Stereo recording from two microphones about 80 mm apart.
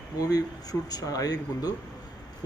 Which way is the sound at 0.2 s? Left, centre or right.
Left.